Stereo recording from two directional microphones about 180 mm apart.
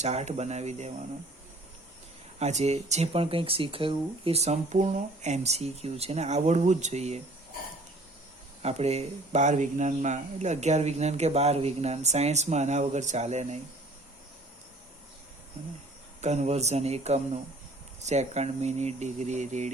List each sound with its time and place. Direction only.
0.0 s speech: 40° right (ahead or behind)
2.4 s speech: 40° right (ahead or behind)
8.6 s speech: 35° right (ahead or behind)
16.2 s speech: 40° right (ahead or behind)